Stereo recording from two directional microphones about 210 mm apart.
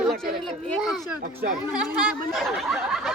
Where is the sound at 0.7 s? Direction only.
Centre (ahead or behind).